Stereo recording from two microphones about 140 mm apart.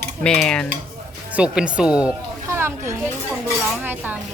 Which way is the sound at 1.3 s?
5° right (ahead or behind).